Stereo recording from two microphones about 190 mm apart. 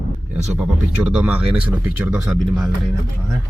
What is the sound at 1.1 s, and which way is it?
A man's voice, 5° right (ahead or behind).